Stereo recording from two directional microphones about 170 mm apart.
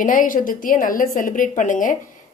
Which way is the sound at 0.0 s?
50° left (ahead or behind).